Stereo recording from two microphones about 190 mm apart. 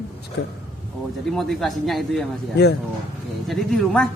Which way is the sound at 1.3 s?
Centre (ahead or behind).